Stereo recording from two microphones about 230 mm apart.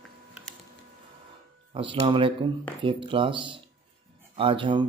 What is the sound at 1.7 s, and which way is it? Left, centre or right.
Speech, right.